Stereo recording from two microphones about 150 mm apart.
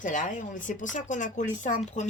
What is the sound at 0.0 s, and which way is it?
Speech, 60° left (ahead or behind).